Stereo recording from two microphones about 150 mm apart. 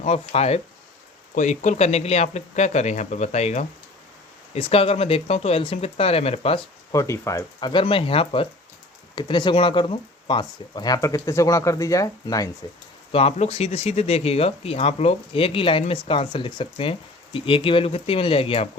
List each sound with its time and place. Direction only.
0.0 s speech: 50° left (ahead or behind)
6.9 s speech: 20° left (ahead or behind)
7.7 s speech: 35° left (ahead or behind)
13.1 s speech: 40° left (ahead or behind)